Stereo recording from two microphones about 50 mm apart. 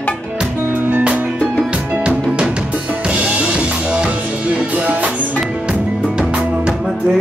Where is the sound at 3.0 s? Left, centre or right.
Right.